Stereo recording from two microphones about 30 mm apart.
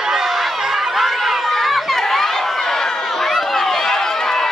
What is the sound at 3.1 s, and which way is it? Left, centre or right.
Run, centre.